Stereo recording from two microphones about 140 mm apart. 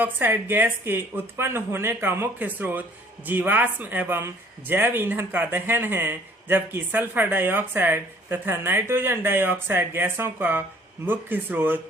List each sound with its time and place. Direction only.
0.0 s speech: 15° right (ahead or behind)